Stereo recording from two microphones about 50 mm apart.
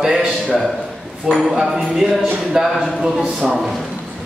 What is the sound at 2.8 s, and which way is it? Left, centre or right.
Speech, centre.